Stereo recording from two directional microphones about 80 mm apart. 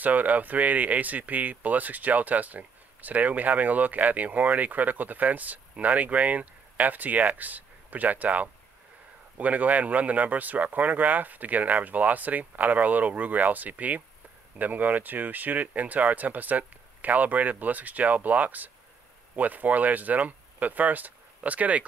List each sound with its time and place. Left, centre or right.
0.0 s speech: right